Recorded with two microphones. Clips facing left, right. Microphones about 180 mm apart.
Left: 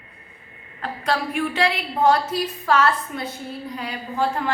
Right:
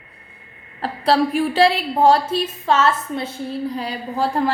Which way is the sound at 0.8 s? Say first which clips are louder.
Right 7 dB; 35° right (ahead or behind).